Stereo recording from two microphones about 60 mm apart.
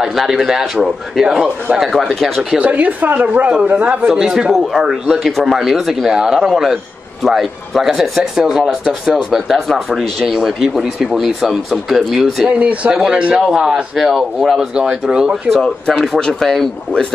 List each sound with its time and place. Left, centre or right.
0.0 s speech: centre
2.6 s a woman's voice: right
4.1 s a man's voice: centre
12.4 s a man's voice: right
13.9 s a man's voice: centre
15.5 s speech: centre